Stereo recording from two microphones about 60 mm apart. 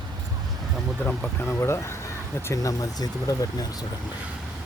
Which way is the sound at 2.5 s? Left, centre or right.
Left.